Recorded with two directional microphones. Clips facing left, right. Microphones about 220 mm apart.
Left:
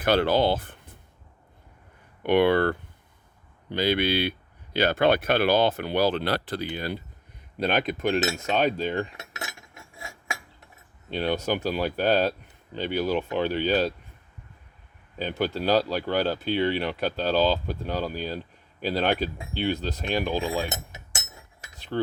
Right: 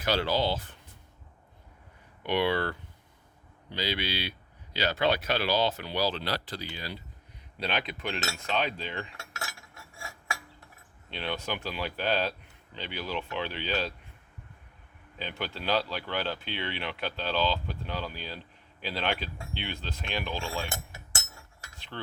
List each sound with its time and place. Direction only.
0.0 s speech: 55° left (ahead or behind)
2.2 s speech: 55° left (ahead or behind)
9.1 s cutlery: 20° left (ahead or behind)
11.1 s speech: 45° left (ahead or behind)
15.2 s speech: 40° left (ahead or behind)
20.7 s a sound: 20° left (ahead or behind)
21.8 s cutlery: 40° left (ahead or behind)